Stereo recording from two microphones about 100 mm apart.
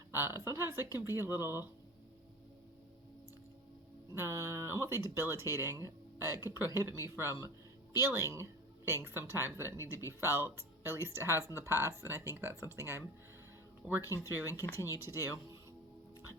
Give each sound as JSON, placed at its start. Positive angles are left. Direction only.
{"t": 0.1, "sound": "speech", "side_deg": -25}
{"t": 4.1, "sound": "speech", "side_deg": -30}
{"t": 13.8, "sound": "speech", "side_deg": -10}
{"t": 14.3, "sound": "speech", "side_deg": -25}